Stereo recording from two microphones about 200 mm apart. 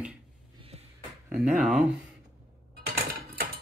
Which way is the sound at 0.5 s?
30° right (ahead or behind).